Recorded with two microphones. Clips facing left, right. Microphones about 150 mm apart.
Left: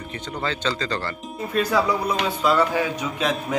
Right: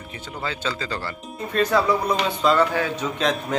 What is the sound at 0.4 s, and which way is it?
Speech, 10° right (ahead or behind).